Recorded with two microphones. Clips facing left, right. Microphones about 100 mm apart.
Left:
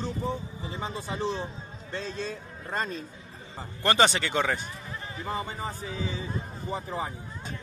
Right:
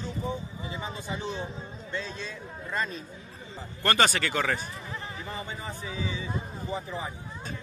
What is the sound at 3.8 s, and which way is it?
Speech, 20° left (ahead or behind).